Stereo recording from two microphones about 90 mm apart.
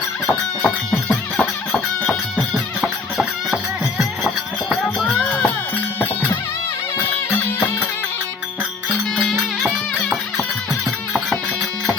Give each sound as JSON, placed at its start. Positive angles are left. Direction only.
{"t": 0.3, "sound": "music", "side_deg": 5}
{"t": 2.8, "sound": "music", "side_deg": -5}
{"t": 4.9, "sound": "music", "side_deg": 10}
{"t": 7.3, "sound": "music", "side_deg": 25}
{"t": 9.1, "sound": "music", "side_deg": 0}